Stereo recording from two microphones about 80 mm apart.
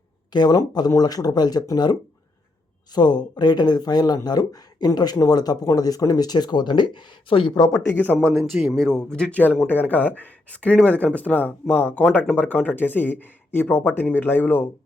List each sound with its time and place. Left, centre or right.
0.3 s speech: left
7.8 s speech: left
8.4 s speech: centre
9.0 s speech: centre